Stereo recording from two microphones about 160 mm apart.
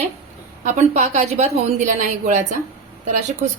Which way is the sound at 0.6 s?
50° right (ahead or behind).